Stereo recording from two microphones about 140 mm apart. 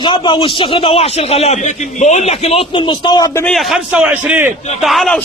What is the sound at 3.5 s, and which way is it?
A man's voice, centre (ahead or behind).